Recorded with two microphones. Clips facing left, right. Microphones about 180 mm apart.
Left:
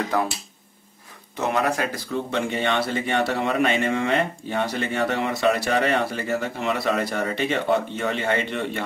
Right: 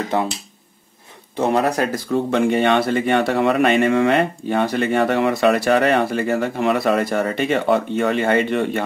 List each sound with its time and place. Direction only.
0.1 s speech: 25° right (ahead or behind)
1.3 s speech: 35° right (ahead or behind)
2.1 s speech: 55° right (ahead or behind)